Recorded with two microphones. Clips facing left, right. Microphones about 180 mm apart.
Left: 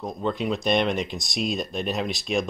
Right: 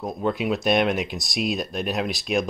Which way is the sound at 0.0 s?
5° right (ahead or behind).